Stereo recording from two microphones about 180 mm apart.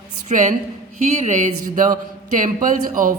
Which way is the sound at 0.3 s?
40° right (ahead or behind).